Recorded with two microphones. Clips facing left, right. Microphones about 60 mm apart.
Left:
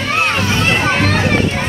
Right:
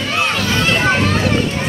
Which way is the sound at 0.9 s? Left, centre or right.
Left.